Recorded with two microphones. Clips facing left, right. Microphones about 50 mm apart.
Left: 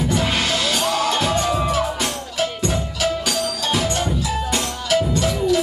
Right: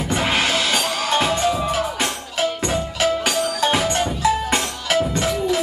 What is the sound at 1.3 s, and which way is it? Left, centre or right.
Music, centre.